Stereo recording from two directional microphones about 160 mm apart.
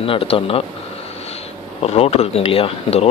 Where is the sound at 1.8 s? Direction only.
40° left (ahead or behind).